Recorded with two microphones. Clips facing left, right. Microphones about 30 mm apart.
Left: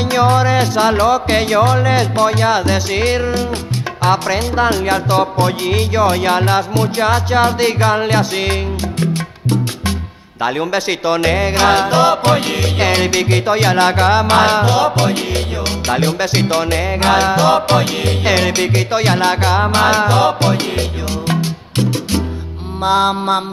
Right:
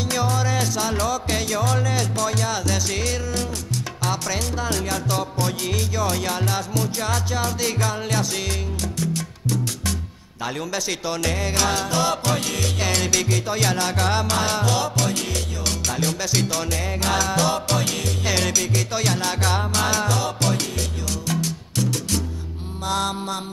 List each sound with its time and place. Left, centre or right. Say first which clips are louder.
0.1 s music: left 11 dB; left